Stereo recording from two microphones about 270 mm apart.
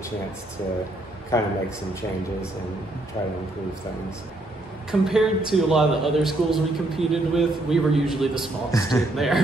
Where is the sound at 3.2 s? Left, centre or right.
Centre.